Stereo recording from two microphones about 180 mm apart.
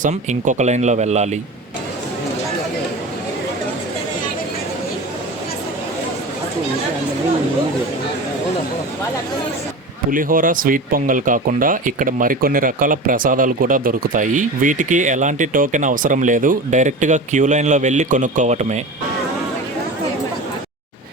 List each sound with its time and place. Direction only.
0.0 s speech: 40° right (ahead or behind)
10.1 s speech: 50° right (ahead or behind)